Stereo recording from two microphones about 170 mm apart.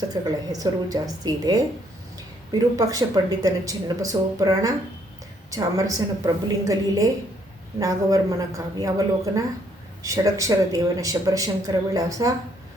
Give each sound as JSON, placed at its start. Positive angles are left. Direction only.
{"t": 0.1, "sound": "speech", "side_deg": -20}